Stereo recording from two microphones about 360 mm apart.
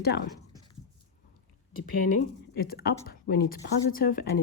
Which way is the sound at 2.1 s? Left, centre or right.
Left.